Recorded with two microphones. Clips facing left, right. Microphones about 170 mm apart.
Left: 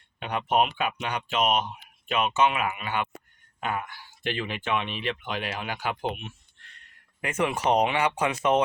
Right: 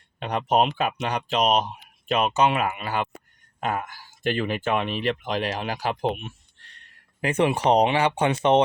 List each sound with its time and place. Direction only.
0.2 s speech: 40° right (ahead or behind)